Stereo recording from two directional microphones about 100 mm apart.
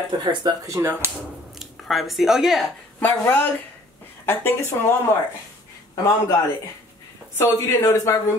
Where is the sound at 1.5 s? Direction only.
Centre (ahead or behind).